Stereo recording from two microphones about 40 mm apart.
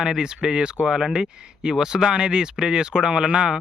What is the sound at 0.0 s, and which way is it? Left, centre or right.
Speech, centre.